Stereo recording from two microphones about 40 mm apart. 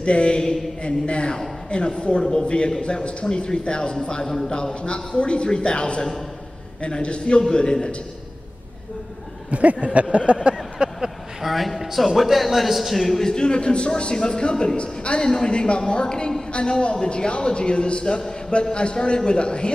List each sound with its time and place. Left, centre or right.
0.0 s a man's voice: left
4.8 s a man's voice: left
9.5 s a sound: right
11.4 s a man's voice: centre
13.2 s a man's voice: left